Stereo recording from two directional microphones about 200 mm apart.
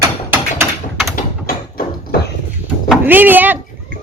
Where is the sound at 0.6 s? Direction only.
5° right (ahead or behind).